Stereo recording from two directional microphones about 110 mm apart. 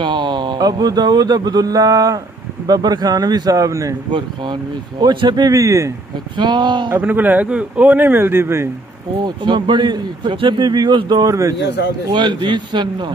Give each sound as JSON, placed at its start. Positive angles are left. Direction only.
{"t": 0.0, "sound": "speech", "side_deg": -45}
{"t": 5.0, "sound": "speech", "side_deg": -40}
{"t": 6.3, "sound": "a man's voice", "side_deg": -45}
{"t": 6.9, "sound": "speech", "side_deg": -15}
{"t": 9.2, "sound": "a man's voice", "side_deg": -45}